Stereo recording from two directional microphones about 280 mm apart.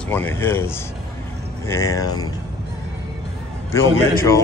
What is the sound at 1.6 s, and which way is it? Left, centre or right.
Speech, centre.